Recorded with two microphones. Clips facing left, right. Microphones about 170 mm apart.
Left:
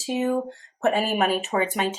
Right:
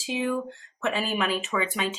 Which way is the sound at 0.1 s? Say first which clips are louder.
Left 4 dB; 45° left (ahead or behind).